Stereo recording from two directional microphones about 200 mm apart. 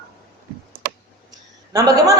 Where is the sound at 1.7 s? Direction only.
15° right (ahead or behind).